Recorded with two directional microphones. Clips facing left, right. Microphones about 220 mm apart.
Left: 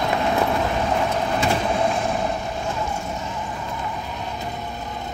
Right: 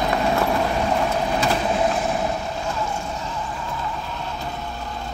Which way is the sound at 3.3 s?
15° left (ahead or behind).